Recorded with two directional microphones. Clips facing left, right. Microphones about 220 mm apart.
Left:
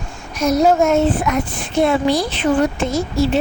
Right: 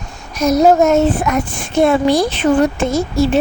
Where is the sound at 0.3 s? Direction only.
40° right (ahead or behind).